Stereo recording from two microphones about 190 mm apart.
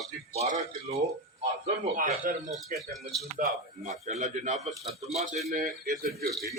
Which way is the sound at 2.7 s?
Centre (ahead or behind).